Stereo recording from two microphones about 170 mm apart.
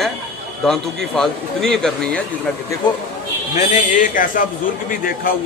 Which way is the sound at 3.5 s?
50° left (ahead or behind).